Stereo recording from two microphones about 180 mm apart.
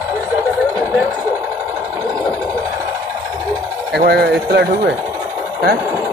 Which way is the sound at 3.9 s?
65° right (ahead or behind).